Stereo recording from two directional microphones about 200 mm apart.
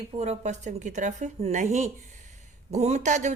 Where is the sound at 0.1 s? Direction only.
35° right (ahead or behind).